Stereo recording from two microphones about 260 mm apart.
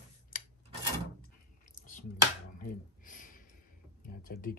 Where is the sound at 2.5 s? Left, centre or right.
Left.